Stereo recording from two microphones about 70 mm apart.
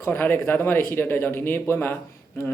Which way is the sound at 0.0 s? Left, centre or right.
Left.